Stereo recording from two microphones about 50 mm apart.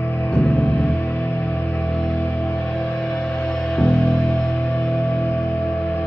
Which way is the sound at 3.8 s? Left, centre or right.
Centre.